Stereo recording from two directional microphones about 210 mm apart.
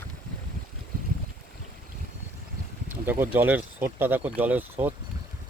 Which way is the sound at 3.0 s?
10° right (ahead or behind).